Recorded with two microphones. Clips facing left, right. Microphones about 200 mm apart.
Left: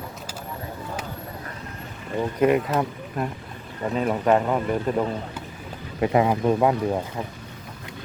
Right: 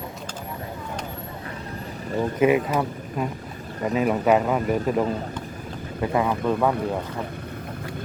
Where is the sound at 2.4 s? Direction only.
5° right (ahead or behind).